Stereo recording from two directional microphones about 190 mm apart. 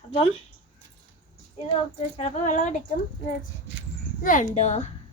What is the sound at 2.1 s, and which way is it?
Speech, 35° left (ahead or behind).